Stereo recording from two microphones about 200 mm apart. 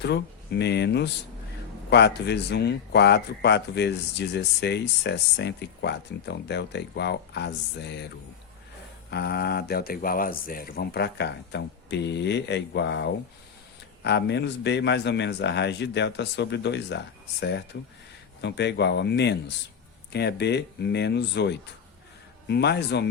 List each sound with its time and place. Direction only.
0.0 s speech: 60° left (ahead or behind)
9.0 s speech: 55° left (ahead or behind)